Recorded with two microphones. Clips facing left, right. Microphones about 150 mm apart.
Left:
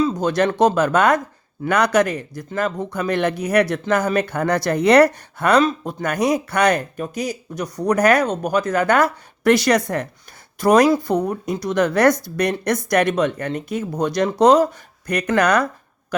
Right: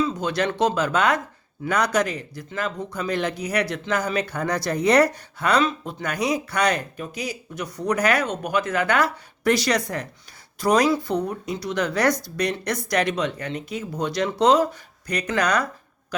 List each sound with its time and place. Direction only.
0.0 s speech: 40° left (ahead or behind)
1.6 s speech: 60° left (ahead or behind)